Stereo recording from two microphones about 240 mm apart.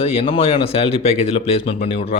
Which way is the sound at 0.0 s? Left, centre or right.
Left.